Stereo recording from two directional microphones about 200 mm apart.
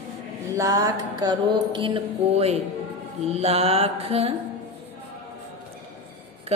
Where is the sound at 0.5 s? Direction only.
15° right (ahead or behind).